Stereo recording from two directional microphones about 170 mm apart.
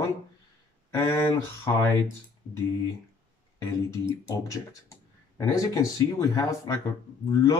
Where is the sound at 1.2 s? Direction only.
15° left (ahead or behind).